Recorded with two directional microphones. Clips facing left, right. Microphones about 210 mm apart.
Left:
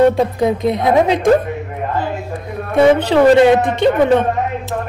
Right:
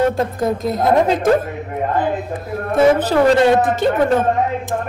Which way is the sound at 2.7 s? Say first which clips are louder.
Left 2 dB; 5° right (ahead or behind).